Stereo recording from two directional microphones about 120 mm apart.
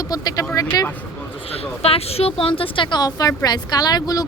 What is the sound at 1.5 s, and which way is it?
A woman's voice, 55° left (ahead or behind).